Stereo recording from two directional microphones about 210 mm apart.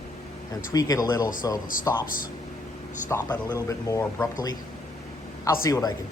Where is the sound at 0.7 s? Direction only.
15° left (ahead or behind).